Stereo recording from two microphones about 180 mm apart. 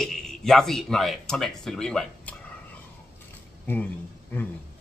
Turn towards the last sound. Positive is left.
turn(degrees=10)  # may be behind; listen again after turning